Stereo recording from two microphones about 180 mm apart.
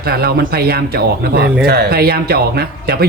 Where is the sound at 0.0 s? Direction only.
60° right (ahead or behind).